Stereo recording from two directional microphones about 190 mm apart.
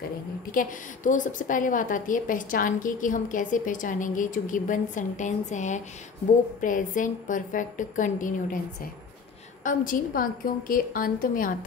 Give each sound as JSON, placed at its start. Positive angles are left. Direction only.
{"t": 0.5, "sound": "a woman's voice", "side_deg": 45}
{"t": 9.6, "sound": "a woman's voice", "side_deg": 45}